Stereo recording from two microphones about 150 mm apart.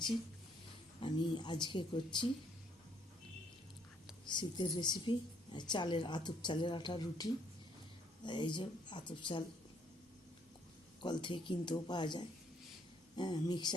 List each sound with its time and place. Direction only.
0.9 s a woman's voice: 30° left (ahead or behind)
4.3 s a woman's voice: 30° left (ahead or behind)
11.0 s speech: 30° left (ahead or behind)